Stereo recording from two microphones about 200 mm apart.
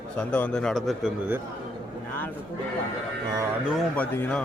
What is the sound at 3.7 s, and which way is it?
Speech, 5° left (ahead or behind).